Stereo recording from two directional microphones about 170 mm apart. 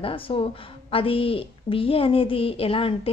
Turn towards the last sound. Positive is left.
turn(degrees=35)  # may be behind; listen again after turning